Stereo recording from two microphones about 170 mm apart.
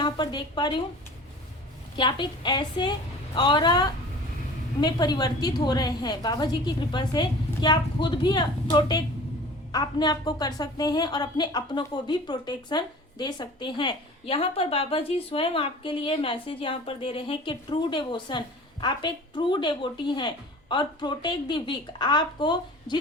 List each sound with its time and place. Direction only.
0.0 s a woman's voice: 25° left (ahead or behind)
2.0 s a woman's voice: 25° left (ahead or behind)